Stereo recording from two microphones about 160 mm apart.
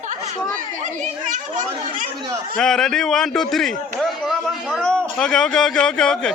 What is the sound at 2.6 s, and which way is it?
A man's voice, 5° left (ahead or behind).